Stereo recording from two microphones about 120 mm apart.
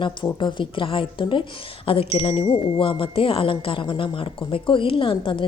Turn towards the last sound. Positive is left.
turn(degrees=45)  # may be behind; listen again after turning